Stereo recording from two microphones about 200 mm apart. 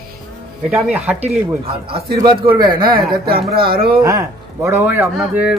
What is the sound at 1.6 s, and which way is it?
A man's voice, 25° right (ahead or behind).